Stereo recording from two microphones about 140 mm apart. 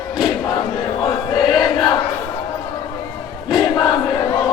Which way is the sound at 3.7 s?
30° left (ahead or behind).